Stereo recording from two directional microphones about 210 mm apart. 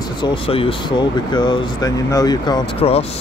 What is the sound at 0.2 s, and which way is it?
Speech, 25° left (ahead or behind).